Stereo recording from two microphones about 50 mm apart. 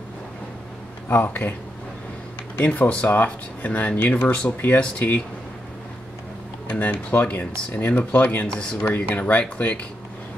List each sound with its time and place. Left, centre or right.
1.0 s speech: left
2.5 s speech: left
6.7 s speech: left